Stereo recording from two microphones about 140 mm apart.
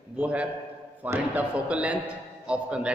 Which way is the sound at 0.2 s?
10° right (ahead or behind).